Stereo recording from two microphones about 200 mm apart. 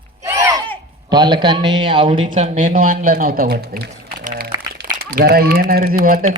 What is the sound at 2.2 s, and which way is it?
Speech, 40° right (ahead or behind).